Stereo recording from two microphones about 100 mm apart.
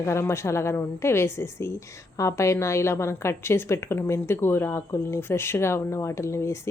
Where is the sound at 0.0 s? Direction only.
25° left (ahead or behind).